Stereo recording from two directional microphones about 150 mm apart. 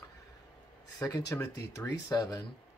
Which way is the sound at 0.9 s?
25° left (ahead or behind).